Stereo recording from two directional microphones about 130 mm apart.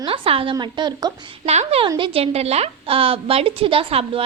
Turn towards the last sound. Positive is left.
turn(degrees=-50)  # may be behind; listen again after turning